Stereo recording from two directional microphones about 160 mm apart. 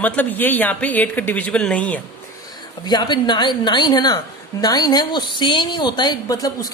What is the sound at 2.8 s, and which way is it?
A woman's voice, 25° left (ahead or behind).